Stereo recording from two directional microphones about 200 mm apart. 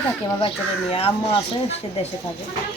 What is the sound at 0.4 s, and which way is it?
Speech, 30° left (ahead or behind).